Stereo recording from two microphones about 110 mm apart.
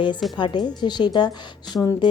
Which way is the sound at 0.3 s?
45° left (ahead or behind).